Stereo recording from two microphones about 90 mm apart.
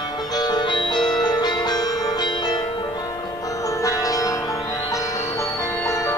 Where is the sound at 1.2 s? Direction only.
50° left (ahead or behind).